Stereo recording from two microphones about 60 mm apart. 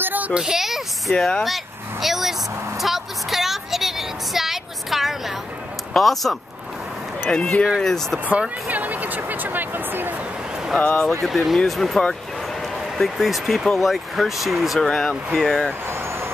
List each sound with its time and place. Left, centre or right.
0.0 s a sound: right
0.3 s speech: centre
1.1 s speech: centre
1.4 s vehicle: centre
2.8 s a sound: centre
5.9 s speech: centre
7.2 s speech: centre
8.3 s speech: right
10.8 s speech: centre
11.2 s speech: centre
14.8 s speech: centre